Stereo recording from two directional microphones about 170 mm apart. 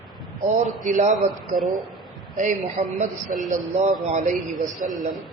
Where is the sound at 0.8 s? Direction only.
50° right (ahead or behind).